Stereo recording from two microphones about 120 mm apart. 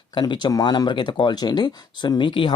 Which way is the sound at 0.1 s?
40° left (ahead or behind).